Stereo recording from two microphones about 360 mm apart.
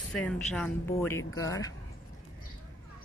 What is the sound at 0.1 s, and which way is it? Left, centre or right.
Speech, centre.